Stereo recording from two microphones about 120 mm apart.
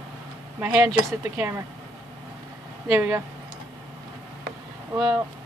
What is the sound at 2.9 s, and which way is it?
Speech, 20° right (ahead or behind).